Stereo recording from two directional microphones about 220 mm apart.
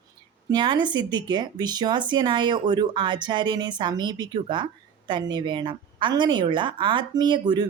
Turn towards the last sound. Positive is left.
turn(degrees=-20)  # may be behind; listen again after turning